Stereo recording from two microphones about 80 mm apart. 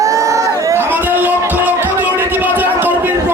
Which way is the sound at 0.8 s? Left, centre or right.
Right.